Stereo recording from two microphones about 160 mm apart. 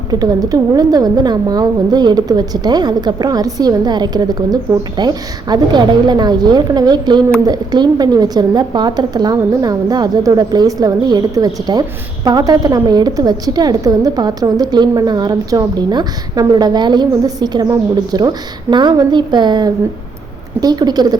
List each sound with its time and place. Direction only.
0.1 s a woman's voice: 25° right (ahead or behind)